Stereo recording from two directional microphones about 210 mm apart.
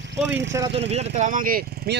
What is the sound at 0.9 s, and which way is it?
Speech, 30° right (ahead or behind).